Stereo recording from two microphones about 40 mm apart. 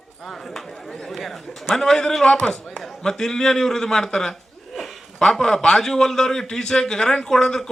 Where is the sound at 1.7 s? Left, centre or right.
Centre.